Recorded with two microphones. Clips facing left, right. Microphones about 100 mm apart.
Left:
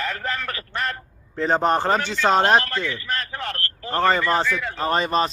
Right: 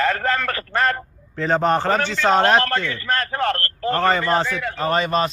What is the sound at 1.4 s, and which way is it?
Speech, 15° left (ahead or behind).